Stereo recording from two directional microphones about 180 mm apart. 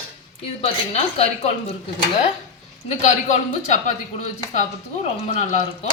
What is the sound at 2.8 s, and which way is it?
Speech, 40° left (ahead or behind).